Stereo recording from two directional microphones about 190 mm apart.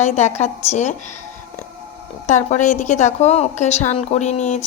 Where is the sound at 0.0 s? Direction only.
35° left (ahead or behind).